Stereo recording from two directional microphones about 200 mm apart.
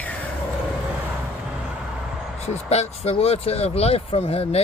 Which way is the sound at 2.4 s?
35° left (ahead or behind).